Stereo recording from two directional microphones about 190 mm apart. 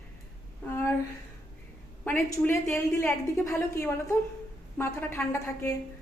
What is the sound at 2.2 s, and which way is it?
A woman's voice, 15° left (ahead or behind).